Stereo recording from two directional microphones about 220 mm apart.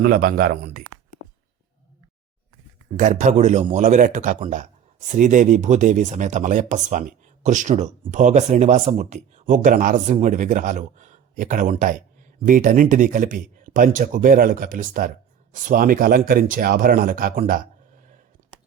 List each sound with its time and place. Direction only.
0.0 s speech: 40° right (ahead or behind)
3.0 s speech: 30° right (ahead or behind)